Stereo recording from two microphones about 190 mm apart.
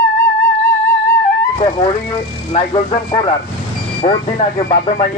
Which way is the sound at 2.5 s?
25° left (ahead or behind).